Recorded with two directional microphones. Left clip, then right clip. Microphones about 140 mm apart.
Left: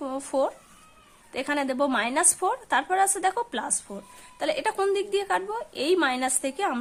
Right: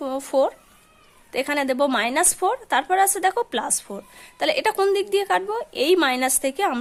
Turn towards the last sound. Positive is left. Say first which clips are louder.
# right 5 dB
turn(degrees=-30)  # may be behind; listen again after turning